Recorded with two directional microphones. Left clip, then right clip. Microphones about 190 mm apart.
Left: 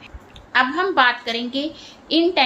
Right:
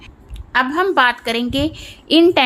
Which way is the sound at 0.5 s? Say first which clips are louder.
Right 2 dB; 40° right (ahead or behind).